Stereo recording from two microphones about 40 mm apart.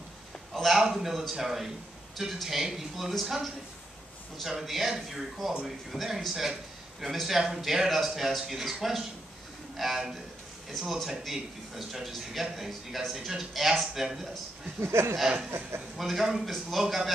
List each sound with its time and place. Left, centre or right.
0.6 s a man's voice: centre
14.8 s a sound: right
16.0 s a man's voice: centre